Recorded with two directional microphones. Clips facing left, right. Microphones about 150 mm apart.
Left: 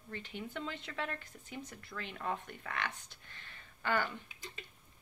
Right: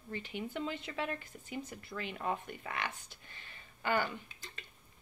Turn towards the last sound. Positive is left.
turn(degrees=-15)  # may be behind; listen again after turning